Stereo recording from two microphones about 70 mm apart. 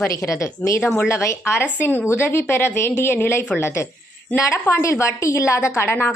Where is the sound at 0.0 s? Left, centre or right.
Left.